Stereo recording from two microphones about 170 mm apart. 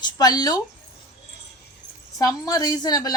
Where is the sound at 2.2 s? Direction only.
20° left (ahead or behind).